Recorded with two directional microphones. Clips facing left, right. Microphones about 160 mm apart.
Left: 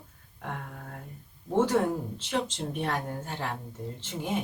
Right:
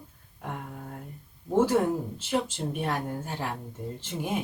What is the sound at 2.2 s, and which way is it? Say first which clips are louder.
Speech: right 2 dB; 10° right (ahead or behind).